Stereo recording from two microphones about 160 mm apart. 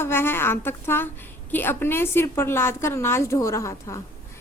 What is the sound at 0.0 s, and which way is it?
A woman's voice, 15° left (ahead or behind).